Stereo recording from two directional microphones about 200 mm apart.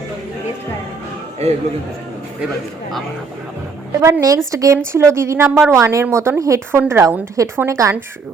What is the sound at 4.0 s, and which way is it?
A woman's voice, 15° right (ahead or behind).